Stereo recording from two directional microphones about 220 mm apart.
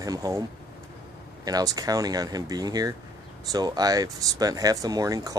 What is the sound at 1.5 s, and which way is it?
Speech, 15° right (ahead or behind).